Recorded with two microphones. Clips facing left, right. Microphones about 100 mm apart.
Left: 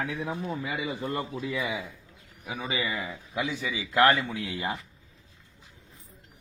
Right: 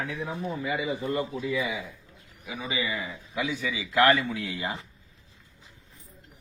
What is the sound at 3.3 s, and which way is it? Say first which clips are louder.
A man's voice: right 1 dB; 25° left (ahead or behind).